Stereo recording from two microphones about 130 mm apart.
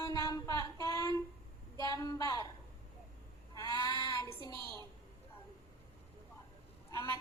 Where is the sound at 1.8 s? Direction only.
30° left (ahead or behind).